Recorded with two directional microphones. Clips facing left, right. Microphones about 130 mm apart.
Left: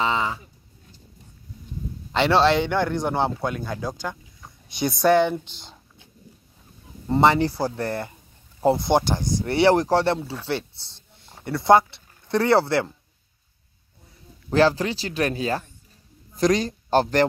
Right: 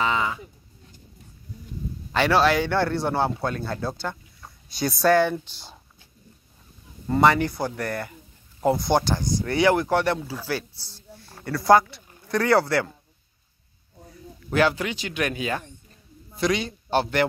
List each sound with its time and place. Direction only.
0.0 s a sound: 25° left (ahead or behind)
2.1 s speech: 25° left (ahead or behind)
7.1 s speech: 25° left (ahead or behind)
14.5 s speech: 35° left (ahead or behind)